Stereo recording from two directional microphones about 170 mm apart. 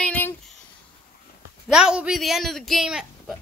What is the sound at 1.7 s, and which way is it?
Speech, 5° right (ahead or behind).